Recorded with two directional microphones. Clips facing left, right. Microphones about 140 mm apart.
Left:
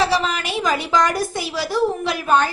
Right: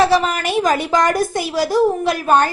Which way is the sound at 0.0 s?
50° right (ahead or behind).